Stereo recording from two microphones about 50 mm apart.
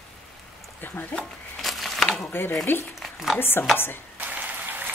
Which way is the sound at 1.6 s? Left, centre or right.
Centre.